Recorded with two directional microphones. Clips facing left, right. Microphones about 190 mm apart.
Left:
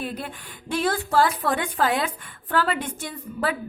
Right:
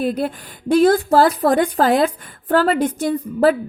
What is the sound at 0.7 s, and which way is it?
Speech, 40° right (ahead or behind).